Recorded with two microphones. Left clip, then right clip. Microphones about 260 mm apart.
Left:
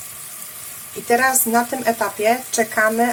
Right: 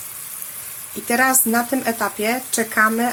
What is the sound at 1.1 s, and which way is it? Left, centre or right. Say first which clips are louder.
Speech: left 1 dB; right.